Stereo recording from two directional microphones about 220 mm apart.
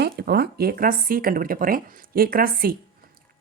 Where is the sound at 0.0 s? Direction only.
45° right (ahead or behind).